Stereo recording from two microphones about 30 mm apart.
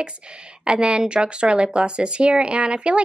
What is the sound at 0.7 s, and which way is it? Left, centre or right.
Speech, right.